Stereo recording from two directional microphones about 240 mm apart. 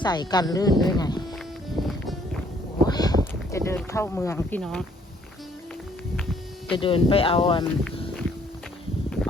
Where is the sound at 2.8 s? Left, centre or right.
Centre.